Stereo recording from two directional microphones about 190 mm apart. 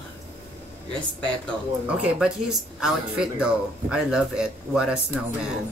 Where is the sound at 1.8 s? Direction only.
5° right (ahead or behind).